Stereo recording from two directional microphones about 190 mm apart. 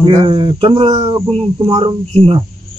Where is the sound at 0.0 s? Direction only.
25° right (ahead or behind).